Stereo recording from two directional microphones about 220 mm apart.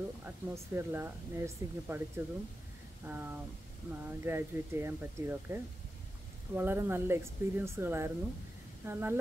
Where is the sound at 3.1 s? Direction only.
10° right (ahead or behind).